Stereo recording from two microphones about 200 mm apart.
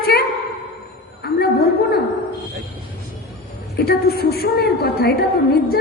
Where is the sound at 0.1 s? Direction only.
50° left (ahead or behind).